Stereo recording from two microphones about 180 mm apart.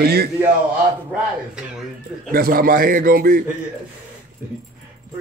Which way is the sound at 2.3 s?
55° right (ahead or behind).